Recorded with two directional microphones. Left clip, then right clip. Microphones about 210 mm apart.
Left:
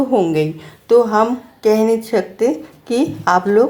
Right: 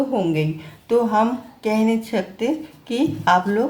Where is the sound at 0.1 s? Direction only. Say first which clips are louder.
Left 6 dB; 30° left (ahead or behind).